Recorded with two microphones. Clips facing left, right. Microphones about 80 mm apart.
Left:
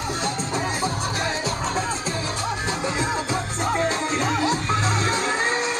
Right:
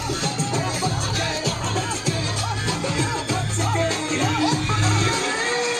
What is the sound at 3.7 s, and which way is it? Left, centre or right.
Music, left.